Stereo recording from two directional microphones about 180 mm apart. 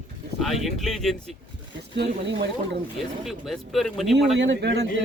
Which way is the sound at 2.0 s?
65° right (ahead or behind).